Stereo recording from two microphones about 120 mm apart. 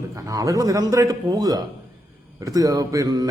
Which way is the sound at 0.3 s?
30° right (ahead or behind).